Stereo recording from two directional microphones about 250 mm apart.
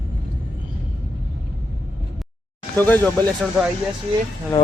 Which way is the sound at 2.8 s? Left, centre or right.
Centre.